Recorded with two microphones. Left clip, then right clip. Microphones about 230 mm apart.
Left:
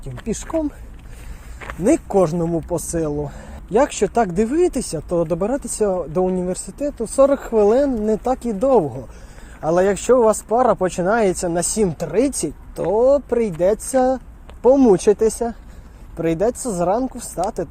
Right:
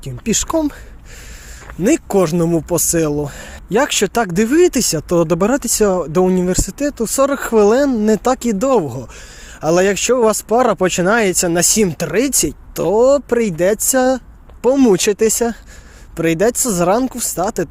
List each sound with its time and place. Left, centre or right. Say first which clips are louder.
0.0 s speech: right 8 dB; right
1.8 s speech: right 2 dB; right